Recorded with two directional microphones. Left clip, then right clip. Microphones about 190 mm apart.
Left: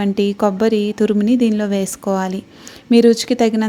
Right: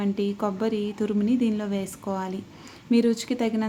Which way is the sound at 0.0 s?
35° left (ahead or behind).